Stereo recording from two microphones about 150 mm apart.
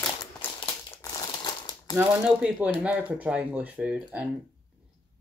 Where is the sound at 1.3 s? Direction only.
30° left (ahead or behind).